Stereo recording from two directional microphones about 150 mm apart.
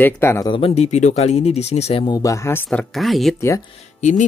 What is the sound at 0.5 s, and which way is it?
Speech, 40° left (ahead or behind).